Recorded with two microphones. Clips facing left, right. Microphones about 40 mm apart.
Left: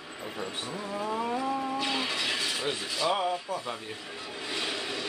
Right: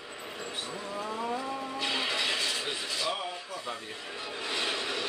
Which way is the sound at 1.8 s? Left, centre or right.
Centre.